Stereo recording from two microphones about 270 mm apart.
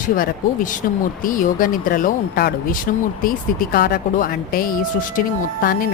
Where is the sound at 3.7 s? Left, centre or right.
Left.